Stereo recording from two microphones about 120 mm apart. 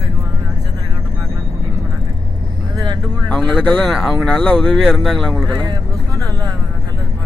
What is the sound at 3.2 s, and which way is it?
Speech, 5° left (ahead or behind).